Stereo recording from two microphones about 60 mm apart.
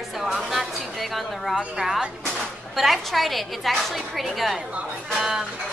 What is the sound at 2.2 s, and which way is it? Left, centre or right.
A woman's voice, centre.